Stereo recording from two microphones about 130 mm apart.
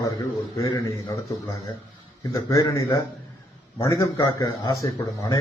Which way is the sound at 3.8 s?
25° left (ahead or behind).